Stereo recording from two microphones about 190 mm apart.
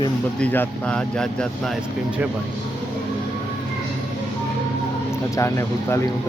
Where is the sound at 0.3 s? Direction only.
10° left (ahead or behind).